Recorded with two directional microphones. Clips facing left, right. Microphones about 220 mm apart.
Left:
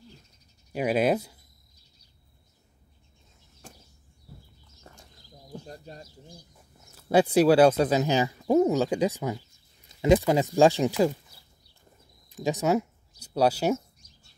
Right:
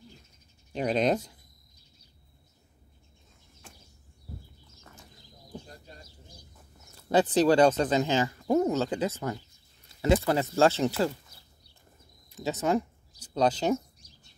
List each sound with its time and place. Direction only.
0.7 s speech: 5° left (ahead or behind)
4.9 s a sound: 35° left (ahead or behind)
5.7 s bird: 40° left (ahead or behind)
7.0 s speech: 10° left (ahead or behind)
12.4 s speech: 15° left (ahead or behind)